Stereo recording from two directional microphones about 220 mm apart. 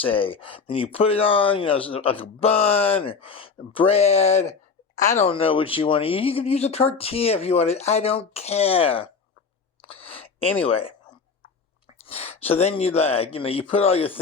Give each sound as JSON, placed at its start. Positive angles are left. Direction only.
{"t": 0.0, "sound": "speech", "side_deg": 25}
{"t": 9.8, "sound": "a sound", "side_deg": 25}
{"t": 10.6, "sound": "speech", "side_deg": 25}
{"t": 12.0, "sound": "speech", "side_deg": 25}